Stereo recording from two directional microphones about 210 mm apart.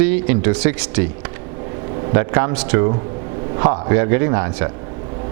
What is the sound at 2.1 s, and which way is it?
Speech, 15° right (ahead or behind).